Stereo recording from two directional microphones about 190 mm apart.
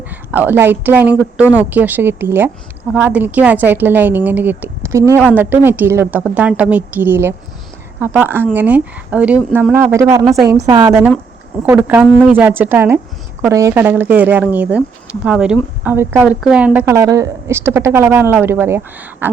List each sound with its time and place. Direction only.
0.3 s a woman's voice: 10° right (ahead or behind)